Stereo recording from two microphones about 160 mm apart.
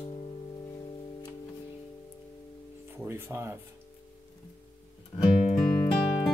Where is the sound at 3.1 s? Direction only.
15° right (ahead or behind).